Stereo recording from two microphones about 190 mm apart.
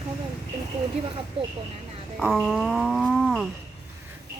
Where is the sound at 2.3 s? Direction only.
Centre (ahead or behind).